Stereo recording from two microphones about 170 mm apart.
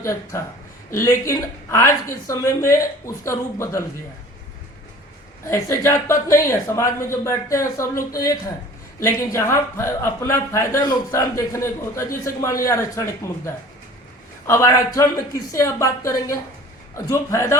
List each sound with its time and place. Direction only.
0.0 s a man's voice: 15° left (ahead or behind)
5.5 s a man's voice: 15° left (ahead or behind)